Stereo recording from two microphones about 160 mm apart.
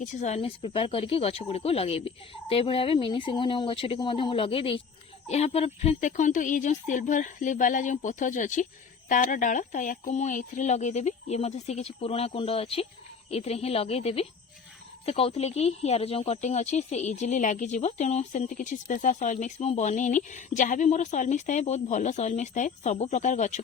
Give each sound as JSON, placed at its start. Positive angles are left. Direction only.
{"t": 0.0, "sound": "speech", "side_deg": 50}